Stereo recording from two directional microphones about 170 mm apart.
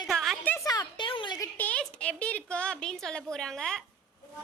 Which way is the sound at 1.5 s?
10° left (ahead or behind).